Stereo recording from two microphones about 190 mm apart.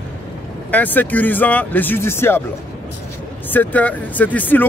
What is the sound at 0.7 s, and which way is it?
Speech, 10° left (ahead or behind).